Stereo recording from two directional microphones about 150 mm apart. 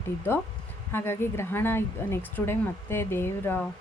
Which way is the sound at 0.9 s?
15° left (ahead or behind).